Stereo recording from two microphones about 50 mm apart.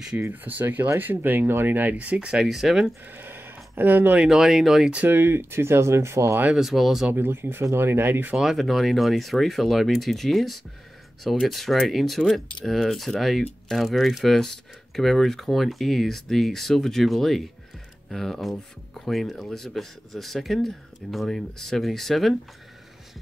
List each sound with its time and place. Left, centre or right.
0.3 s speech: right
2.4 s speech: centre
3.2 s a sound: right
4.3 s speech: centre
5.0 s speech: right
6.6 s speech: centre
7.2 s speech: right
8.5 s speech: centre